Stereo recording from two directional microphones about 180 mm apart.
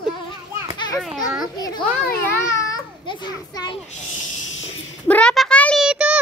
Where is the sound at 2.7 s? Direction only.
20° left (ahead or behind).